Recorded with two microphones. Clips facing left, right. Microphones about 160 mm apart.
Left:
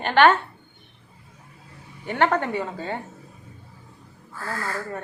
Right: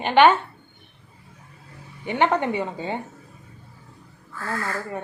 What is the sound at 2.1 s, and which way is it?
Speech, 10° right (ahead or behind).